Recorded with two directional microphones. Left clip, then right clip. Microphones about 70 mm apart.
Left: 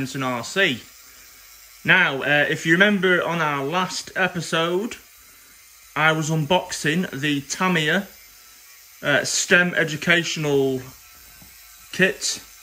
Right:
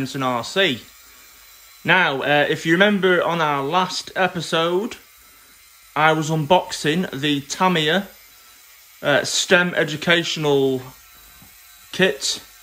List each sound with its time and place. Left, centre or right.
0.0 s speech: right
1.8 s speech: right
9.0 s speech: right
11.9 s speech: right